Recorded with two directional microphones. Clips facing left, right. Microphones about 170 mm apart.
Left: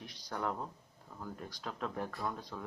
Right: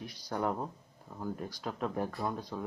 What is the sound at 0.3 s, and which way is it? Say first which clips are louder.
Speech: right 4 dB; 20° right (ahead or behind).